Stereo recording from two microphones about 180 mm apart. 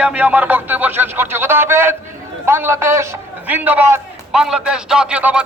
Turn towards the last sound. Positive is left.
turn(degrees=-5)  # may be behind; listen again after turning